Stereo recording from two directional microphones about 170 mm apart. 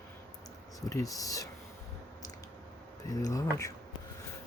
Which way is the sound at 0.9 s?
20° left (ahead or behind).